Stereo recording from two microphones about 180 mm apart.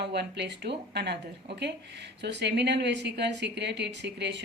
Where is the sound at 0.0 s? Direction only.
70° right (ahead or behind).